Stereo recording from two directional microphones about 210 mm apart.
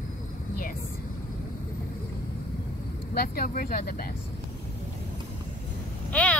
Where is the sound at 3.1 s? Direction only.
40° left (ahead or behind).